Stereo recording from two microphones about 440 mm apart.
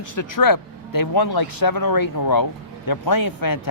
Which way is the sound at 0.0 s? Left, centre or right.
Left.